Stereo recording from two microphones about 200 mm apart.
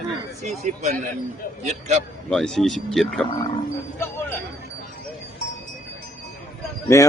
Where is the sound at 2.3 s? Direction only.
5° left (ahead or behind).